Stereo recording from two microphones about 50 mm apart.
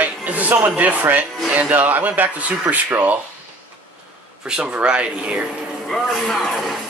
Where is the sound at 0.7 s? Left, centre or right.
Right.